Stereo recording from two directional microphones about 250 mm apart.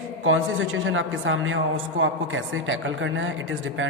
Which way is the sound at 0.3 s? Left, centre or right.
Right.